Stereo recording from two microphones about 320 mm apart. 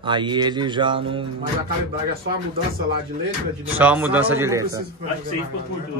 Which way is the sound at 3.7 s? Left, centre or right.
Centre.